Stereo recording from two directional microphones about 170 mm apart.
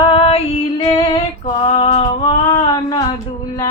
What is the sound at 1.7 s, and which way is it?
Music, 40° left (ahead or behind).